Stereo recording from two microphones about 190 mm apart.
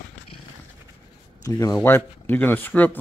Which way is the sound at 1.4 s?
20° left (ahead or behind).